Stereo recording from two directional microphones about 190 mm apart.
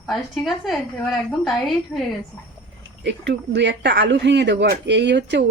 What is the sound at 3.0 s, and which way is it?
Speech, 65° right (ahead or behind).